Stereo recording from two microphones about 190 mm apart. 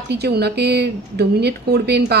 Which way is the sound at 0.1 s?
60° right (ahead or behind).